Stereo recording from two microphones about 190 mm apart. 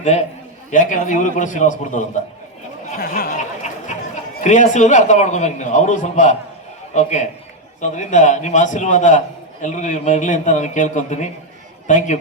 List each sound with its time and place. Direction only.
0.0 s a man's voice: 35° left (ahead or behind)
3.0 s a man's voice: 50° left (ahead or behind)